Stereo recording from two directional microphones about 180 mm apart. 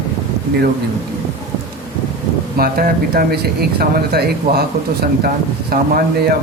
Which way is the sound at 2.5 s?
55° right (ahead or behind).